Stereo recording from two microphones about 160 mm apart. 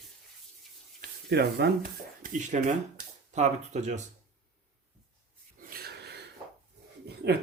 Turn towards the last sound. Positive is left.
turn(degrees=-90)